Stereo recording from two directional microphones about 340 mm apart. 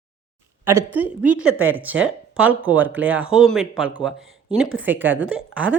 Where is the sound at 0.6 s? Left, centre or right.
Centre.